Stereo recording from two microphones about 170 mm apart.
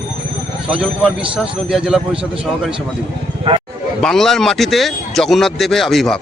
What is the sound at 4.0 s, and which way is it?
Speech, centre (ahead or behind).